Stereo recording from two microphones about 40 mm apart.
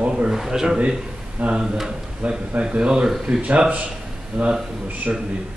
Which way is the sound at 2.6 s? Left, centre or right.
Right.